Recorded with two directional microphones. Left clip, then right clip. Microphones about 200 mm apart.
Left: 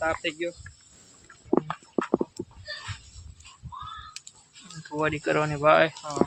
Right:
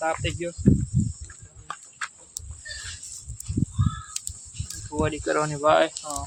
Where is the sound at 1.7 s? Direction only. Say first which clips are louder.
Left 4 dB; 35° right (ahead or behind).